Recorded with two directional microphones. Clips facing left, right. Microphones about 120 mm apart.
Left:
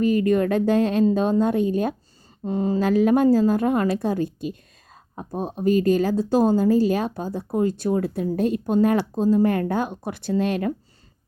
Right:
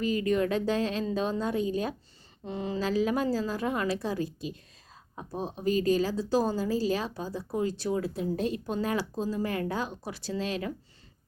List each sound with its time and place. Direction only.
0.0 s speech: 50° left (ahead or behind)
2.4 s a sound: 40° left (ahead or behind)
2.8 s speech: 55° left (ahead or behind)